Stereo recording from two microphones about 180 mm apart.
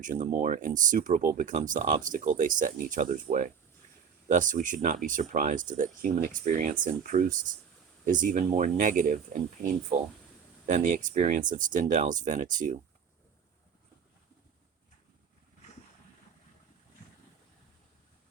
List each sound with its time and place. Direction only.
0.0 s speech: 45° right (ahead or behind)